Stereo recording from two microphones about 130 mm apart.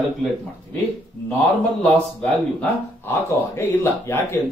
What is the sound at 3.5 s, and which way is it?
Speech, 20° left (ahead or behind).